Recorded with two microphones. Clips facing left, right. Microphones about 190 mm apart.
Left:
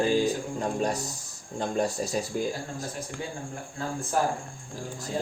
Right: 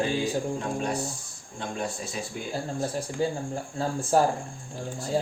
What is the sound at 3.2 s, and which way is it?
Speech, 30° right (ahead or behind).